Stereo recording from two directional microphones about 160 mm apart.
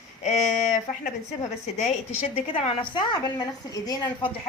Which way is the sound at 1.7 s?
45° left (ahead or behind).